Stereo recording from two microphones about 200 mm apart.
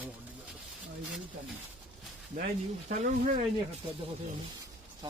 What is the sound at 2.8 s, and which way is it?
Speech, 40° right (ahead or behind).